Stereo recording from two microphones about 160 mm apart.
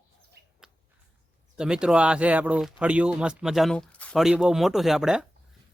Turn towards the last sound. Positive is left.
turn(degrees=-5)  # may be behind; listen again after turning